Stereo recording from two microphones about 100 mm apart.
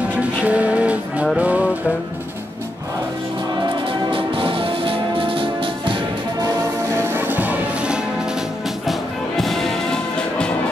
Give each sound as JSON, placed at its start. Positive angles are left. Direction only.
{"t": 0.2, "sound": "music", "side_deg": -15}
{"t": 4.1, "sound": "music", "side_deg": -65}
{"t": 7.0, "sound": "music", "side_deg": -20}
{"t": 9.4, "sound": "music", "side_deg": 5}